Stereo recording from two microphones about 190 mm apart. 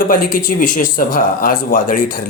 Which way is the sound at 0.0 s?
45° left (ahead or behind).